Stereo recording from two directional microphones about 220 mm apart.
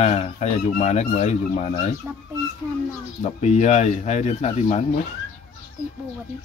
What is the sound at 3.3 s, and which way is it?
Speech, 30° left (ahead or behind).